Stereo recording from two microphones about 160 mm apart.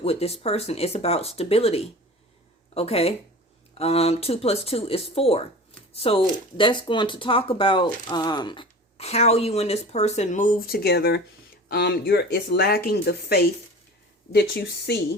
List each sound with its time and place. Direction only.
0.0 s speech: 40° left (ahead or behind)
9.0 s speech: 40° left (ahead or behind); by 13.5 s 75° left (ahead or behind)
14.3 s speech: 90° left